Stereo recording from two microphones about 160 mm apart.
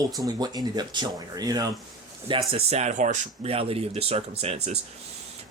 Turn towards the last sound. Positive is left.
turn(degrees=-40)  # may be behind; listen again after turning